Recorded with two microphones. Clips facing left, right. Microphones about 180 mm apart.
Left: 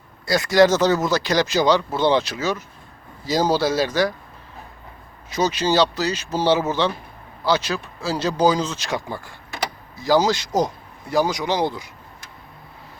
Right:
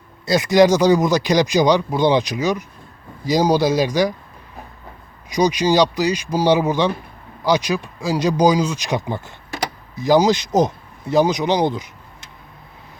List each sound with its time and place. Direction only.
0.3 s speech: 20° right (ahead or behind)
5.3 s speech: 15° right (ahead or behind)